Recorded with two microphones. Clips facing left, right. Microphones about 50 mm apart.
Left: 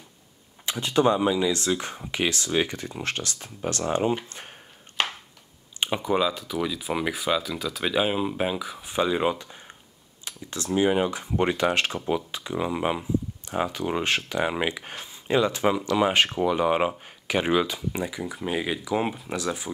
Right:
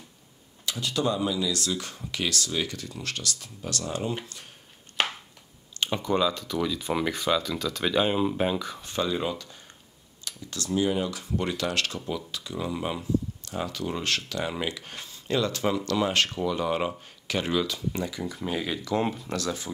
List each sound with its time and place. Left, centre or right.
0.7 s speech: left
5.8 s speech: centre
8.9 s speech: left